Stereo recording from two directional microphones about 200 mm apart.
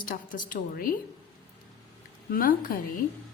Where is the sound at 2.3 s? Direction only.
45° left (ahead or behind).